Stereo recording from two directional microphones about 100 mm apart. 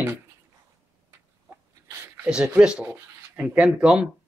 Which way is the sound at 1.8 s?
25° right (ahead or behind).